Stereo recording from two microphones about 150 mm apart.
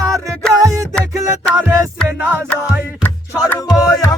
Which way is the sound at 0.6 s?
20° right (ahead or behind).